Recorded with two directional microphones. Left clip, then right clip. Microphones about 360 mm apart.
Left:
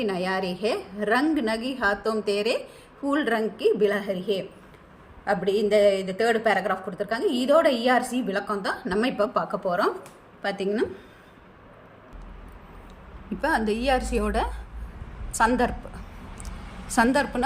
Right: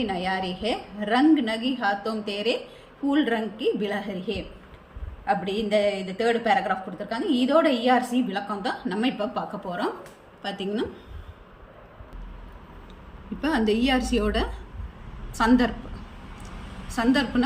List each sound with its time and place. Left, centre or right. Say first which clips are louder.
0.0 s a woman's voice: left 1 dB; centre
13.4 s a woman's voice: even; centre
16.9 s a woman's voice: left 2 dB; centre